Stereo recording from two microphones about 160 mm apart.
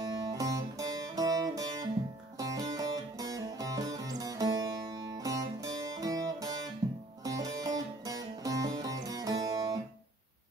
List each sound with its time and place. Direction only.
0.0 s music: 25° right (ahead or behind)